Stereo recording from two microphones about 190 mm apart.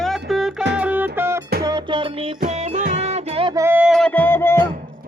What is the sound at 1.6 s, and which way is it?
Music, 25° right (ahead or behind).